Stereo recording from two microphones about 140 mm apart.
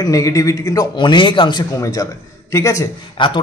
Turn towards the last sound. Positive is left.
turn(degrees=35)  # may be behind; listen again after turning